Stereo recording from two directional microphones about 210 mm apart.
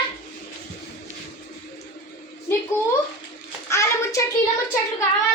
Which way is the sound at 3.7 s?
15° left (ahead or behind).